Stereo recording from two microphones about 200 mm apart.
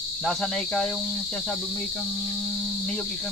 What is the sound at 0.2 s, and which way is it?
Cricket, 5° left (ahead or behind).